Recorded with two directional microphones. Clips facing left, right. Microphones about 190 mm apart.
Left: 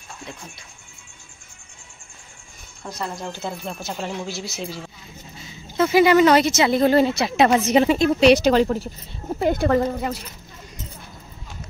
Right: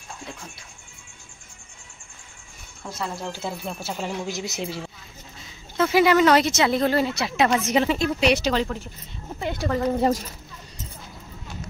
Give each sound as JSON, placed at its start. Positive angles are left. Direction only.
{"t": 2.8, "sound": "speech", "side_deg": 0}
{"t": 4.3, "sound": "a woman's voice", "side_deg": -20}
{"t": 5.8, "sound": "speech", "side_deg": 0}
{"t": 6.9, "sound": "a woman's voice", "side_deg": 20}
{"t": 8.2, "sound": "speech", "side_deg": 30}
{"t": 9.4, "sound": "speech", "side_deg": 45}
{"t": 9.9, "sound": "speech", "side_deg": -35}